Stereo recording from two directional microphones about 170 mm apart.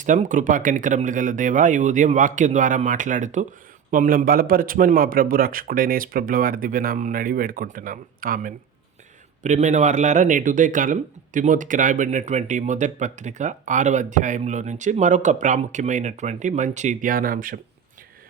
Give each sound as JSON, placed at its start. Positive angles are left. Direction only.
{"t": 0.0, "sound": "a man's voice", "side_deg": -45}